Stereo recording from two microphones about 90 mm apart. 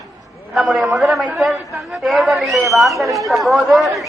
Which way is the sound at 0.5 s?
Centre (ahead or behind).